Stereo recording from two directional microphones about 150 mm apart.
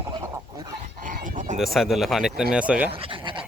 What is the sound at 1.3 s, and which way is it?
Frog, 55° right (ahead or behind).